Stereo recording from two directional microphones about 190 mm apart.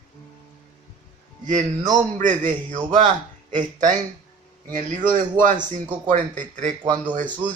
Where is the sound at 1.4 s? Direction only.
40° right (ahead or behind).